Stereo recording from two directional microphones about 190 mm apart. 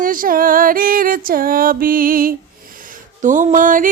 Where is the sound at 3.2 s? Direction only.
40° right (ahead or behind).